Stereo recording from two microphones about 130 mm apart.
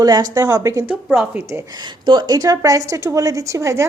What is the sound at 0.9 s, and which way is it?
A woman's voice, 10° right (ahead or behind).